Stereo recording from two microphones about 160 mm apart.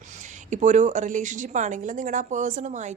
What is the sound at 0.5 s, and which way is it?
Speech, 50° right (ahead or behind).